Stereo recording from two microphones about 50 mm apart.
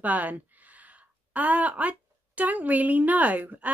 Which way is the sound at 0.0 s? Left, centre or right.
Right.